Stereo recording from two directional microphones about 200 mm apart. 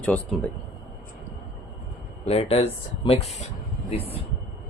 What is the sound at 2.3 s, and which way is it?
Speech, 30° left (ahead or behind).